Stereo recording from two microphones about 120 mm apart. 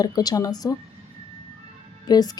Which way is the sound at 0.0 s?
35° left (ahead or behind).